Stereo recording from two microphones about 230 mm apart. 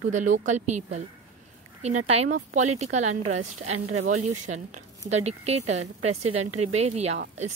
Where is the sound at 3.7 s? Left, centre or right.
Right.